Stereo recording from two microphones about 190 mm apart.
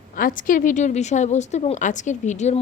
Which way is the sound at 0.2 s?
45° left (ahead or behind).